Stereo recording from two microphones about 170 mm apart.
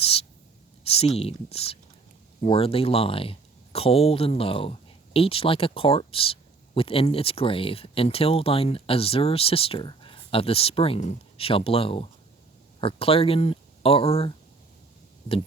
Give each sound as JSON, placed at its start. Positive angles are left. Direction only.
{"t": 0.0, "sound": "writing", "side_deg": 35}
{"t": 1.1, "sound": "speech", "side_deg": 35}